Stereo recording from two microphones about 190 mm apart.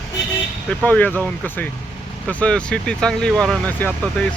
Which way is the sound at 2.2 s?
5° left (ahead or behind).